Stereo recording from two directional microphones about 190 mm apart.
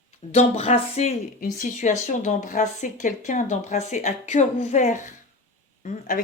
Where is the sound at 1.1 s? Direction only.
45° left (ahead or behind).